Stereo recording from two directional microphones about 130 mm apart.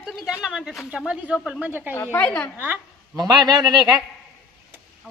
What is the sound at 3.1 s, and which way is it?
Speech, 30° right (ahead or behind).